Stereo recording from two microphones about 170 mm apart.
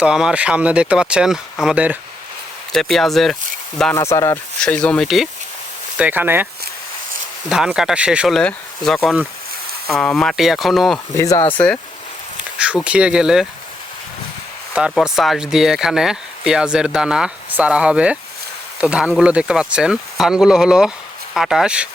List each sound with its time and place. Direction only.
0.0 s speech: 5° right (ahead or behind)
3.9 s speech: 15° left (ahead or behind)
4.6 s speech: 5° left (ahead or behind)
6.0 s speech: 10° right (ahead or behind)
7.5 s speech: 5° right (ahead or behind)
11.2 s speech: 15° left (ahead or behind)
12.8 s speech: 5° right (ahead or behind)
14.8 s speech: 5° right (ahead or behind)